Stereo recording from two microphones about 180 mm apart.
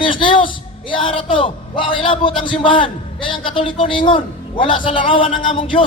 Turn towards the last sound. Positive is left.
turn(degrees=30)  # may be behind; listen again after turning